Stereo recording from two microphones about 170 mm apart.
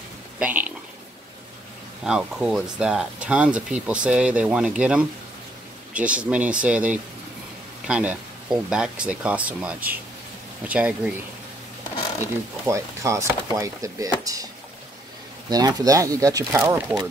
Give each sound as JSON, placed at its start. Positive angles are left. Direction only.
{"t": 0.4, "sound": "speech", "side_deg": -10}
{"t": 2.0, "sound": "speech", "side_deg": -5}
{"t": 12.6, "sound": "speech", "side_deg": -20}
{"t": 15.5, "sound": "speech", "side_deg": -20}